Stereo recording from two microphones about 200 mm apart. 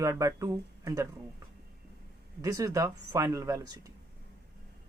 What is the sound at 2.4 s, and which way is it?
Speech, 15° right (ahead or behind).